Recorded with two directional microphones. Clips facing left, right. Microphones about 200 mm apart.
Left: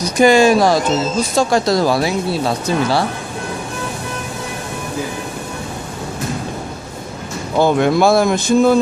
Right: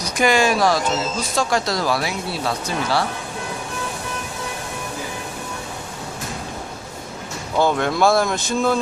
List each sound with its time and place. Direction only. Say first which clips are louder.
0.0 s speech: left 7 dB; 25° left (ahead or behind)
7.5 s speech: left 6 dB; 15° left (ahead or behind)